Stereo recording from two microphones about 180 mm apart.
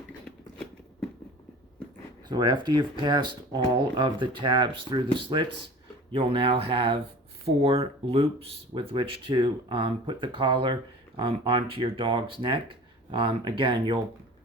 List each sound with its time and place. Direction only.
2.3 s speech: 25° right (ahead or behind)